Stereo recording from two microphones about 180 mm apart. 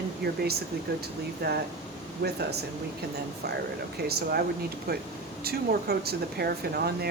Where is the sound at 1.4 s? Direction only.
65° right (ahead or behind).